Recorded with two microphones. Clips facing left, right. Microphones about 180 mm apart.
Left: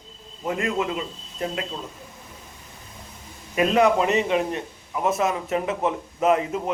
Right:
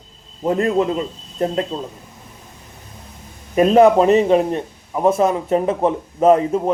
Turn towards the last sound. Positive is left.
turn(degrees=-35)  # may be behind; listen again after turning